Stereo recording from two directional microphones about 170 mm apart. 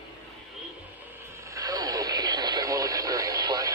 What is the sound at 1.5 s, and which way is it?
Radio, 20° right (ahead or behind).